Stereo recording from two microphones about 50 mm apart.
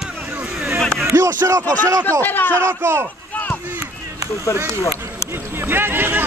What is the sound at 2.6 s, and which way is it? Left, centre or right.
Speech, right.